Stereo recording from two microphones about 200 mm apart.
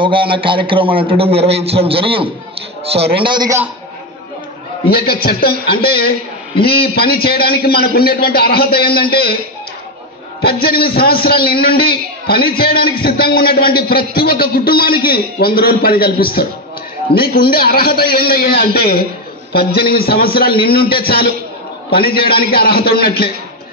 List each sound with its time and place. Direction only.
0.0 s a man's voice: 25° right (ahead or behind)
4.9 s a man's voice: 50° left (ahead or behind)
10.4 s a man's voice: 50° left (ahead or behind)